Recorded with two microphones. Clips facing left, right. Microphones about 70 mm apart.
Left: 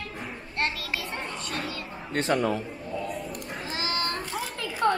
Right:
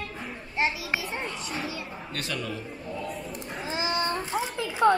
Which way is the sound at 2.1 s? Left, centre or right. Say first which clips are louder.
Left 9 dB; left.